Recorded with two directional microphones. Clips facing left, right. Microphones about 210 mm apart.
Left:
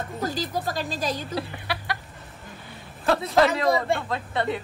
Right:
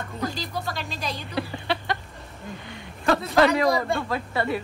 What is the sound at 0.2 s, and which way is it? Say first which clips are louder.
A woman's voice: left 2 dB; 45° left (ahead or behind).